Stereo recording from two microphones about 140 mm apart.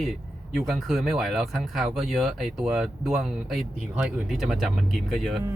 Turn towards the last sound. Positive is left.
turn(degrees=0)  # may be behind; listen again after turning